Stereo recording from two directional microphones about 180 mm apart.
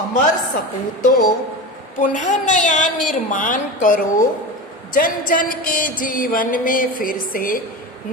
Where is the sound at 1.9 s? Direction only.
45° left (ahead or behind).